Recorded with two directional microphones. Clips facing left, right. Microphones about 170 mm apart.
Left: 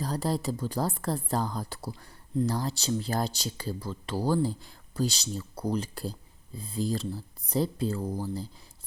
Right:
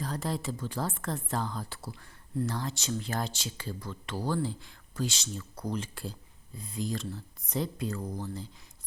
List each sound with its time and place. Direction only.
0.0 s speech: 35° left (ahead or behind)